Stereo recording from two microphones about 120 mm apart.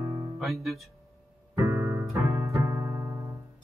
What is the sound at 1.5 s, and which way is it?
Music, 25° right (ahead or behind).